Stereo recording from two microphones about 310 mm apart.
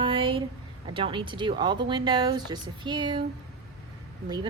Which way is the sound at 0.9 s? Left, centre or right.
Centre.